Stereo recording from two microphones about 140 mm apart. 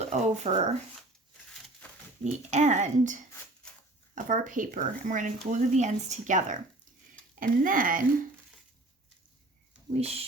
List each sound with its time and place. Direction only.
0.0 s speech: 55° right (ahead or behind)
2.2 s speech: 55° right (ahead or behind)
7.3 s speech: 75° right (ahead or behind)